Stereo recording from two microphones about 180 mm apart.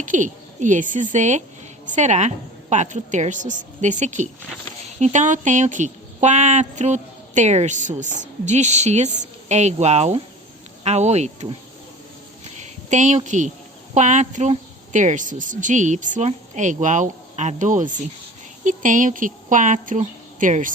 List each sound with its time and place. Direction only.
0.0 s a woman's voice: 45° right (ahead or behind)
12.5 s a sound: 40° right (ahead or behind)
13.9 s a woman's voice: 40° right (ahead or behind)